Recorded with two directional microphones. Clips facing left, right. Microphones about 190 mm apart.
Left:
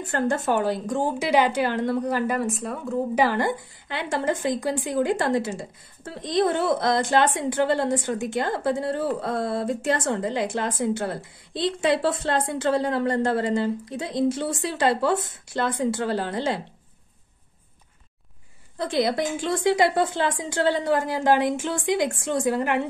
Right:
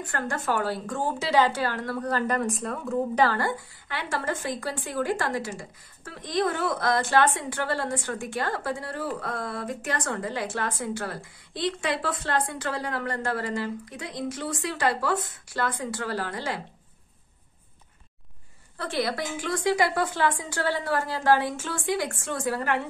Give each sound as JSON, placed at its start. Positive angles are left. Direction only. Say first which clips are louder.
{"t": 0.0, "sound": "a woman's voice", "louder": "left 6 dB", "side_deg": 25}
{"t": 2.9, "sound": "speech", "louder": "left 1 dB", "side_deg": 15}
{"t": 18.8, "sound": "speech", "louder": "left 5 dB", "side_deg": 20}